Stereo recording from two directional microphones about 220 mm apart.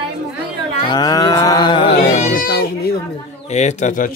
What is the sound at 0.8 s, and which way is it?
Cat, 20° left (ahead or behind).